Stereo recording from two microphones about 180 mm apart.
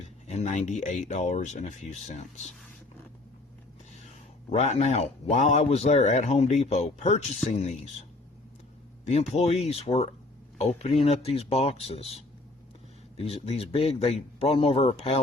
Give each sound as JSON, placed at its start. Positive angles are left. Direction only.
{"t": 0.3, "sound": "speech", "side_deg": 40}
{"t": 4.4, "sound": "speech", "side_deg": 40}
{"t": 9.0, "sound": "speech", "side_deg": 35}